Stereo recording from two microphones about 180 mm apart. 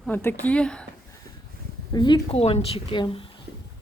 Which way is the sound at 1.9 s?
25° left (ahead or behind).